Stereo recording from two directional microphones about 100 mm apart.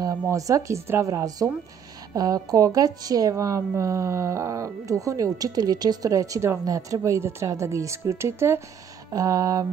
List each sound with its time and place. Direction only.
0.3 s a woman's voice: 35° right (ahead or behind)